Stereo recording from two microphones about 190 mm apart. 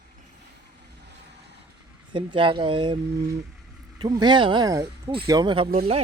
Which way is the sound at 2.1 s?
25° right (ahead or behind).